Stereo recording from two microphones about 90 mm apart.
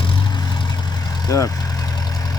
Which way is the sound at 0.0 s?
70° left (ahead or behind).